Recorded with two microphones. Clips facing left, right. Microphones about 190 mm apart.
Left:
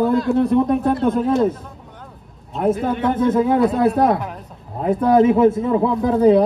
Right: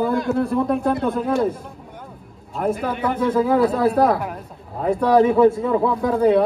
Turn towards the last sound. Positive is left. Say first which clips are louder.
# left 2 dB
turn(degrees=20)  # may be behind; listen again after turning